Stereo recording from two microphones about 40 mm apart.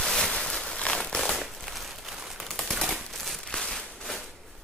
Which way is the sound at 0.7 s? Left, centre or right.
Centre.